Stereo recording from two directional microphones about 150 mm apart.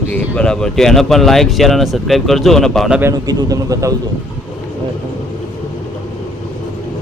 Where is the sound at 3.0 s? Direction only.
25° right (ahead or behind).